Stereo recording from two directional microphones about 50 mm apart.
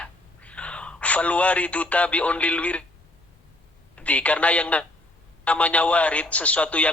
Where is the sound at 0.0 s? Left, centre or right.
Left.